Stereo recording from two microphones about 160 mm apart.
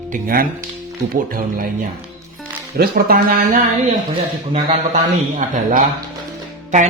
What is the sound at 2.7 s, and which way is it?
Speech, 70° right (ahead or behind).